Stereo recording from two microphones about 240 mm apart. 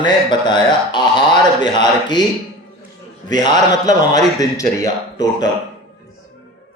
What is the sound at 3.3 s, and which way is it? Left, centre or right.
A man's voice, centre.